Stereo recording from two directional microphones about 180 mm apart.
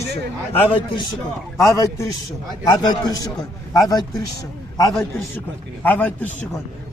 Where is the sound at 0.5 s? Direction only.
30° left (ahead or behind).